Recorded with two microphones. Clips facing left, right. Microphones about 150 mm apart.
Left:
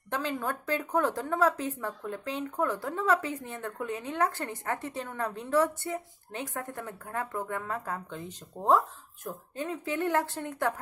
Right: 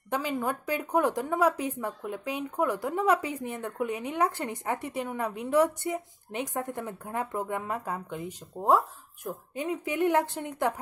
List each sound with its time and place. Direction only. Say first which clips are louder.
0.1 s a woman's voice: right 2 dB; 10° right (ahead or behind)